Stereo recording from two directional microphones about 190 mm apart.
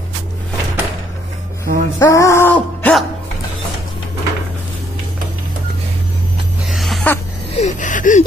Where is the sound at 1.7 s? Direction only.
50° right (ahead or behind).